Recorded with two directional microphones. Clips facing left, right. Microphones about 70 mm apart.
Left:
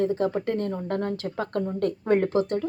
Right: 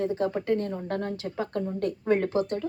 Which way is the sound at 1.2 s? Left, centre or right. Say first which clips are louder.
Left 2 dB; left.